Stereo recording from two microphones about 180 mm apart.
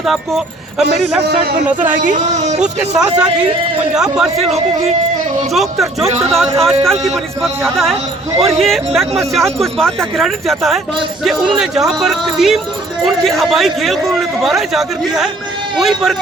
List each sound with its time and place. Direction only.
0.0 s speech: centre (ahead or behind)
2.0 s speech: 45° right (ahead or behind)
2.6 s speech: 5° right (ahead or behind)